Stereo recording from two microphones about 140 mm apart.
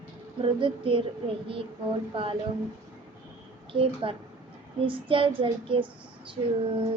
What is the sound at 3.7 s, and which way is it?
A child's voice, 40° right (ahead or behind).